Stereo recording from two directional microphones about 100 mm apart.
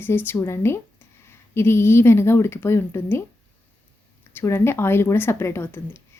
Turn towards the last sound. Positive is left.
turn(degrees=25)  # may be behind; listen again after turning